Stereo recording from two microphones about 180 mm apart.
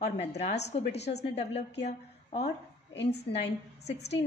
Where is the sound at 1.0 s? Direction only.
70° left (ahead or behind).